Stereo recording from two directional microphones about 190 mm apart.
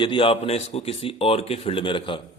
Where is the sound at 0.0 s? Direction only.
25° left (ahead or behind).